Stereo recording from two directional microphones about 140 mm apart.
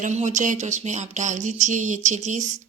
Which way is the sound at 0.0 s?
60° right (ahead or behind).